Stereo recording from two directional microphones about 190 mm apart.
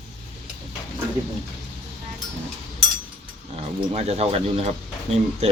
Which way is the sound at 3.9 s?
35° right (ahead or behind).